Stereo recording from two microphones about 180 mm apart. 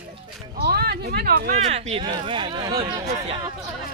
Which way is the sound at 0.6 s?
60° right (ahead or behind).